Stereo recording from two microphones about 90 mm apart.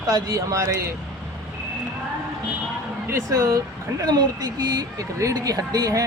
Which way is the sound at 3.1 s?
35° right (ahead or behind).